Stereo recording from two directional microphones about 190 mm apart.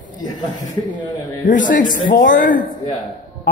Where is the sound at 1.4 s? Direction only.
45° left (ahead or behind).